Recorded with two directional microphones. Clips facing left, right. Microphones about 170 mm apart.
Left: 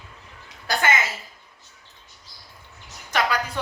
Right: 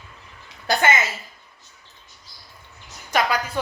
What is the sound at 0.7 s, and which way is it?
Speech, 25° right (ahead or behind).